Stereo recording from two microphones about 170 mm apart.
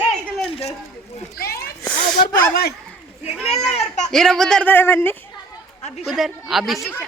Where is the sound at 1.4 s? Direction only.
65° left (ahead or behind).